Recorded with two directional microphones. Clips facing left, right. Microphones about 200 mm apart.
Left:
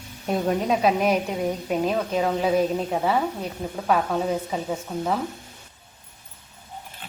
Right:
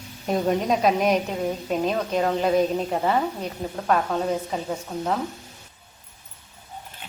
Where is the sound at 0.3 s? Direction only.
Centre (ahead or behind).